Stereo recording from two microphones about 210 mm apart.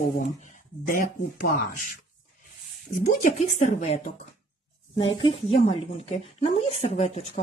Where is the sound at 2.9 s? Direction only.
40° left (ahead or behind).